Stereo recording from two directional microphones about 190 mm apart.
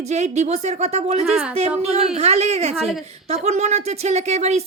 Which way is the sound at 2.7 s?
Centre (ahead or behind).